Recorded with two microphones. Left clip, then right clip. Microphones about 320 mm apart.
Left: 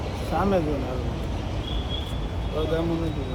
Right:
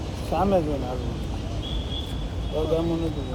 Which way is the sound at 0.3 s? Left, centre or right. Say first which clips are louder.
Right 2 dB; right.